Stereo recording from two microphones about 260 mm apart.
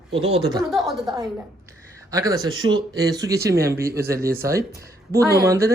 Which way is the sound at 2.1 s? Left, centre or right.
Centre.